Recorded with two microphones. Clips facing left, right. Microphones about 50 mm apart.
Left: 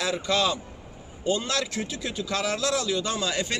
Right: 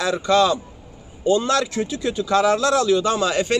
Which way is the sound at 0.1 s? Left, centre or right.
Right.